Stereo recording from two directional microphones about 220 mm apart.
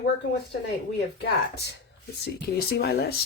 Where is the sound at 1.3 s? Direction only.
50° left (ahead or behind).